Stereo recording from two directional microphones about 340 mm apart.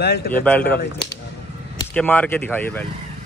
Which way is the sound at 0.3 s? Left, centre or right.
Centre.